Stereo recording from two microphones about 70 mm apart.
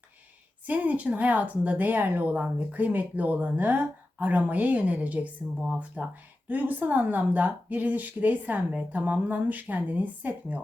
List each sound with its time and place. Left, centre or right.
0.6 s speech: right